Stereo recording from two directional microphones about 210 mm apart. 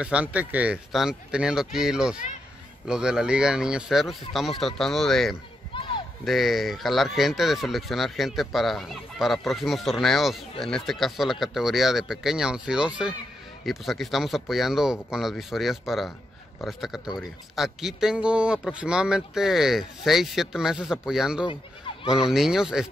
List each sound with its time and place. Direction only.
0.0 s speech: 5° right (ahead or behind)
5.7 s speech: 25° left (ahead or behind)
6.2 s speech: centre (ahead or behind)